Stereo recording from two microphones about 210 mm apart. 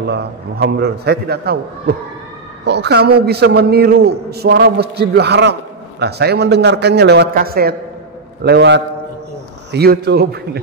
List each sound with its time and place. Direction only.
0.0 s a man's voice: 50° right (ahead or behind)
2.6 s a man's voice: 55° right (ahead or behind)